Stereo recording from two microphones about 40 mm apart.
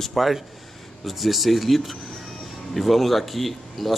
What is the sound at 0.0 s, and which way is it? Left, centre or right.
Speech, centre.